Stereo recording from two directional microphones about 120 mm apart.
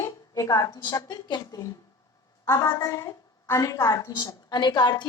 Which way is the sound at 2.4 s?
25° left (ahead or behind).